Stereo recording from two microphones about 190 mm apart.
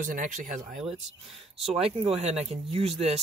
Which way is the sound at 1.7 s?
30° right (ahead or behind).